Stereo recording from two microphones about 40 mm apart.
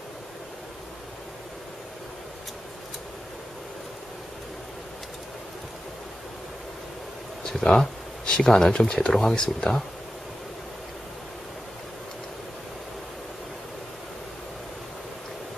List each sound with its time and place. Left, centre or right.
7.7 s speech: centre